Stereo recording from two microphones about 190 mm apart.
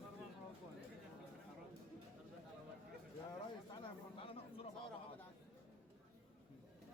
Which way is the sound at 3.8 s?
30° left (ahead or behind).